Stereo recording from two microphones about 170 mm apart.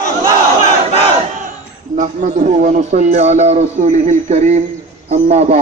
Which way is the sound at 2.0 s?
45° right (ahead or behind).